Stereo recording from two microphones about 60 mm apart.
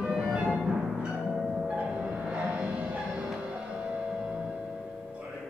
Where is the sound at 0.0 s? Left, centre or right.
Centre.